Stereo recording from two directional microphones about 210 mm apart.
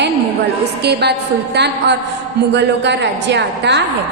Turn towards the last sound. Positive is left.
turn(degrees=-55)  # may be behind; listen again after turning